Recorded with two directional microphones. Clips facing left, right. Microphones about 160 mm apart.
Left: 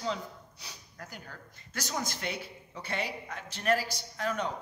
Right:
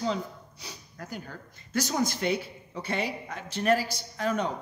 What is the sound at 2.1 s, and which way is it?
A man's voice, 25° right (ahead or behind).